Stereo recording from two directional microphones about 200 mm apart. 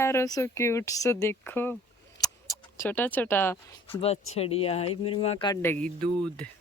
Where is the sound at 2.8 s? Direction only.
10° left (ahead or behind).